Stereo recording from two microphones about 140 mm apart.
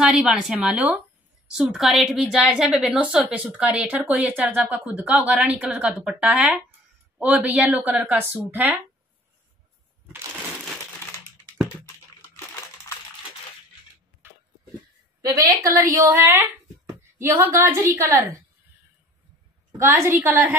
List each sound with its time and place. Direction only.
0.0 s a woman's voice: 5° right (ahead or behind)
12.2 s a sound: 20° left (ahead or behind)
15.2 s a woman's voice: 25° right (ahead or behind)
19.8 s a woman's voice: 20° right (ahead or behind)